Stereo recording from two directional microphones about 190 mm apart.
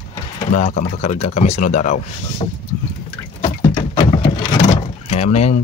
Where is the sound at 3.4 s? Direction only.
25° left (ahead or behind).